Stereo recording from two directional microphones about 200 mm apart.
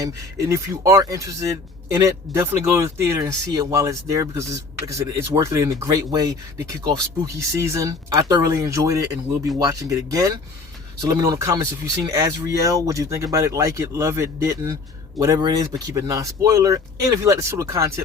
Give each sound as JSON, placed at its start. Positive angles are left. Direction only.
{"t": 0.0, "sound": "speech", "side_deg": -15}